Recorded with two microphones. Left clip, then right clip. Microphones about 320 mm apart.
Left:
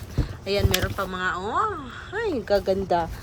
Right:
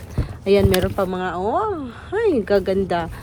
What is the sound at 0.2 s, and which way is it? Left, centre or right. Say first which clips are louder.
Speech: right 9 dB; centre.